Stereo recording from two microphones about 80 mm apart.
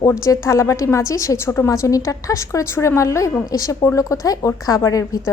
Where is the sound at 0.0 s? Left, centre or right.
Left.